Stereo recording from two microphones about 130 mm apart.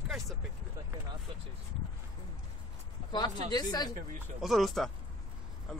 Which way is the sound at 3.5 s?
30° left (ahead or behind).